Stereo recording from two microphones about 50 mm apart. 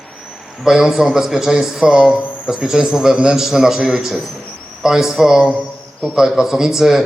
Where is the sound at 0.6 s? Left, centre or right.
Centre.